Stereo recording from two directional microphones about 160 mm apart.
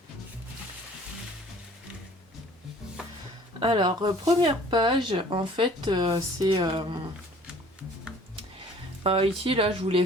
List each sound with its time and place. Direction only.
3.6 s speech: 30° right (ahead or behind)
9.0 s speech: 35° right (ahead or behind)